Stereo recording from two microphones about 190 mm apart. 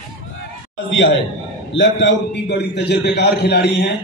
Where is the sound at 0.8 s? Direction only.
75° left (ahead or behind).